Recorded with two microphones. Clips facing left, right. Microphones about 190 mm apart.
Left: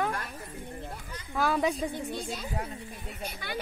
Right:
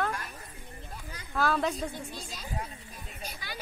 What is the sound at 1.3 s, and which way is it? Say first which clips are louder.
Speech: left 1 dB; 10° left (ahead or behind).